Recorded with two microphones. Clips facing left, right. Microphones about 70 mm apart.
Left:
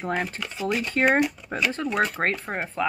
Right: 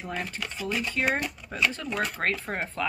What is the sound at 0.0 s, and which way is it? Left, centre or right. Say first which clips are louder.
Speech: left 6 dB; left.